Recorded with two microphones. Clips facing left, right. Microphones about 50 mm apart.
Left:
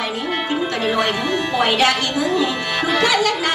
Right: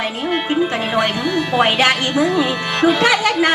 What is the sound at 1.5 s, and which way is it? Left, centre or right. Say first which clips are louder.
Music: right 2 dB; right.